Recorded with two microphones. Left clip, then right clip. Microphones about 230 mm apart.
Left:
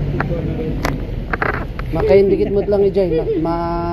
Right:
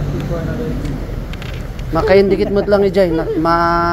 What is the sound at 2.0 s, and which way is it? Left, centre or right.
Speech, right.